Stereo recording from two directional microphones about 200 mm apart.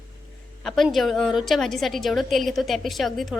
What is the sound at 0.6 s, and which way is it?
A woman's voice, centre (ahead or behind).